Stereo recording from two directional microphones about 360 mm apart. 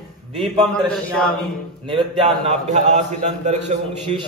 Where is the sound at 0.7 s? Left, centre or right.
Centre.